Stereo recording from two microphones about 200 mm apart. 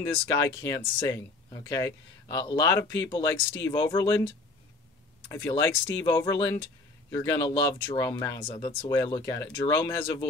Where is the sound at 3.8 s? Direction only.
15° left (ahead or behind).